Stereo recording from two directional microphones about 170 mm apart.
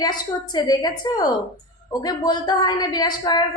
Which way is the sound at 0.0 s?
25° left (ahead or behind).